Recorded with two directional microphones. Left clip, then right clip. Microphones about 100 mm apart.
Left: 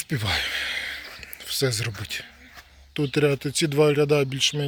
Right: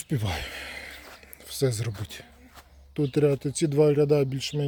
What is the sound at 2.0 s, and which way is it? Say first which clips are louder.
Speech: left 9 dB; 30° right (ahead or behind).